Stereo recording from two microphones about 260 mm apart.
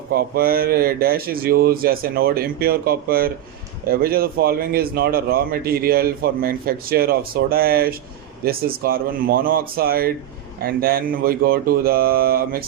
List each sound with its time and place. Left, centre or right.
0.1 s a man's voice: right